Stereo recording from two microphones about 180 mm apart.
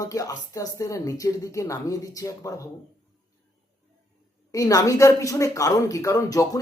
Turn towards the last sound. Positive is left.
turn(degrees=20)  # may be behind; listen again after turning